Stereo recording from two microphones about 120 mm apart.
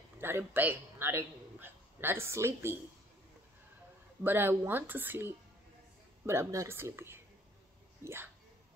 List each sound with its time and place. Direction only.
0.2 s a man's voice: 20° right (ahead or behind)
4.2 s speech: 15° right (ahead or behind)